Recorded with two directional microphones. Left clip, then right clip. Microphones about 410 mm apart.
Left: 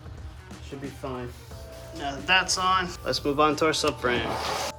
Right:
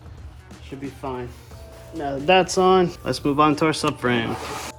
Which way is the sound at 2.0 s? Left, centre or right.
Centre.